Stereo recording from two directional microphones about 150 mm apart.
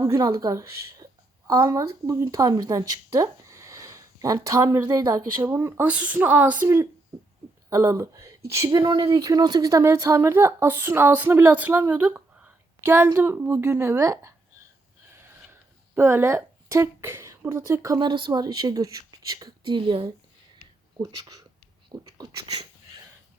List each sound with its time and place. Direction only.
0.0 s a woman's voice: 20° right (ahead or behind)
16.0 s a woman's voice: 15° right (ahead or behind)